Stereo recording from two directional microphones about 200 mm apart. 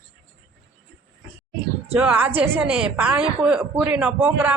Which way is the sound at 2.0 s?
10° right (ahead or behind).